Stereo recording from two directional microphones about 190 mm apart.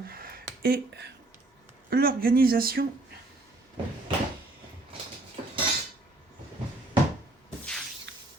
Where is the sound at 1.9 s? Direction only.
50° right (ahead or behind).